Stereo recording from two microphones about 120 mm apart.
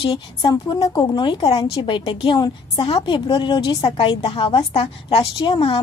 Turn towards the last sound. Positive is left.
turn(degrees=40)  # may be behind; listen again after turning